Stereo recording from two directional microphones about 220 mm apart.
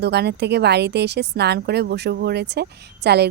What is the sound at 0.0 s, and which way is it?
Speech, 50° right (ahead or behind).